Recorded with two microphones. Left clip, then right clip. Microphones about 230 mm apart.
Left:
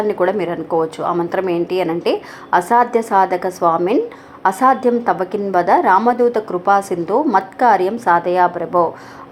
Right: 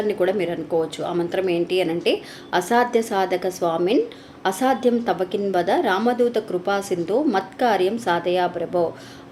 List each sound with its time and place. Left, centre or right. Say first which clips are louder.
0.1 s a woman's voice: left 4 dB; centre